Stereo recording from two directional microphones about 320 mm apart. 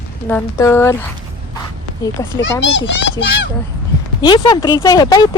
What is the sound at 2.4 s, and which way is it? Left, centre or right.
Speech, left.